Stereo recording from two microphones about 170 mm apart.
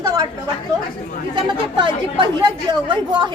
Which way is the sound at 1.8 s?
30° right (ahead or behind).